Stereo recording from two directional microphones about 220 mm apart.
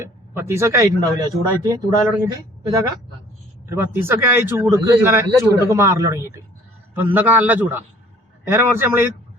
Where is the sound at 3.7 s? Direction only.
10° right (ahead or behind).